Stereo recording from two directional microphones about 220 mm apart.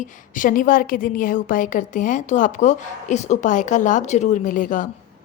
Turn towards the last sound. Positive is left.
turn(degrees=35)  # may be behind; listen again after turning